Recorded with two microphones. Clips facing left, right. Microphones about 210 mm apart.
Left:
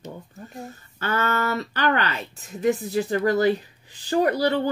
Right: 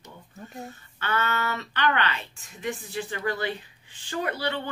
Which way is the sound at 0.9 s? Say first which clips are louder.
Left 4 dB; 40° left (ahead or behind).